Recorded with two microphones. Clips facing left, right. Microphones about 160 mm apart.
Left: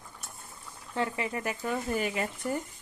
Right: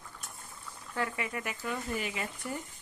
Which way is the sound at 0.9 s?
25° left (ahead or behind).